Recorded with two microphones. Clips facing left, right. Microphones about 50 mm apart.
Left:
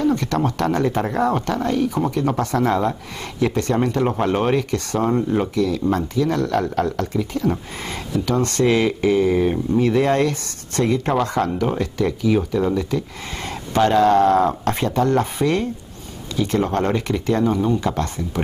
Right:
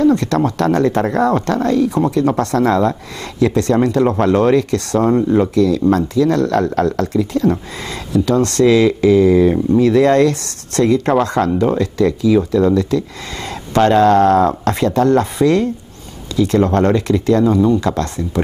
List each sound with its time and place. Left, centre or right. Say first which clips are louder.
0.0 s speech: right 6 dB; right
5.1 s speech: right 7 dB; centre
5.5 s speech: right 6 dB; right